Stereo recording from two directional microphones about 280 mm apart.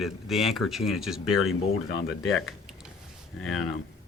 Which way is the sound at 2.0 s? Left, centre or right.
Left.